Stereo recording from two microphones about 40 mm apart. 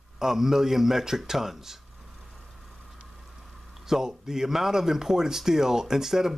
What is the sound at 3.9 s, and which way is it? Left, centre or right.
Speech, centre.